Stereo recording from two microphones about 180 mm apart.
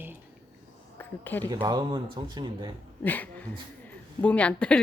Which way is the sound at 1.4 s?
20° right (ahead or behind).